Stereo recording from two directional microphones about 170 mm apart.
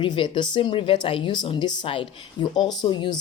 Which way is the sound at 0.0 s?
30° left (ahead or behind).